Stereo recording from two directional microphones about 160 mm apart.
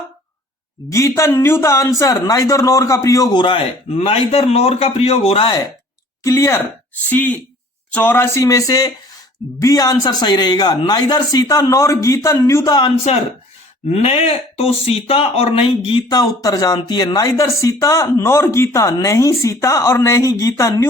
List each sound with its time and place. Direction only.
0.9 s a man's voice: 20° left (ahead or behind); by 5.5 s 40° left (ahead or behind)
6.2 s speech: 20° left (ahead or behind)
13.9 s a man's voice: 40° left (ahead or behind)
16.1 s speech: 20° left (ahead or behind)